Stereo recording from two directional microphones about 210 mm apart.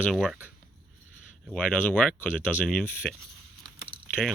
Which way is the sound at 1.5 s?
5° left (ahead or behind).